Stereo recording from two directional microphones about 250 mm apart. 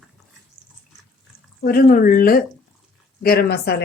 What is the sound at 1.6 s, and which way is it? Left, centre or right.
Speech, left.